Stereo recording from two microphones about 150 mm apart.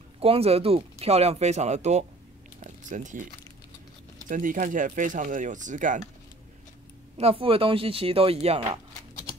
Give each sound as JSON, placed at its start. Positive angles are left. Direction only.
{"t": 0.2, "sound": "speech", "side_deg": -40}
{"t": 2.6, "sound": "a sound", "side_deg": -55}
{"t": 4.3, "sound": "speech", "side_deg": -60}
{"t": 7.2, "sound": "speech", "side_deg": -40}